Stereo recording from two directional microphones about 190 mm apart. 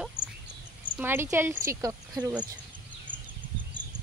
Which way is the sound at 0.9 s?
10° right (ahead or behind).